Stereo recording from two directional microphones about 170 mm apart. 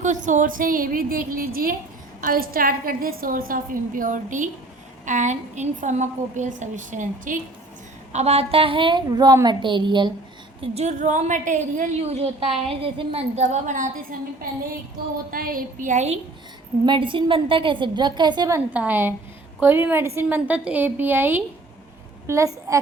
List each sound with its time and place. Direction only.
0.0 s a woman's voice: 45° right (ahead or behind)
8.1 s a woman's voice: 40° right (ahead or behind)
10.6 s a woman's voice: 40° right (ahead or behind)
15.3 s a woman's voice: 60° right (ahead or behind); by 16.2 s 40° right (ahead or behind)
16.8 s a woman's voice: 30° right (ahead or behind)
18.7 s a woman's voice: 10° right (ahead or behind)